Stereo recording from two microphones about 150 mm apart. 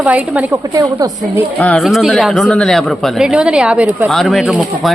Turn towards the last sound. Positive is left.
turn(degrees=0)  # may be behind; listen again after turning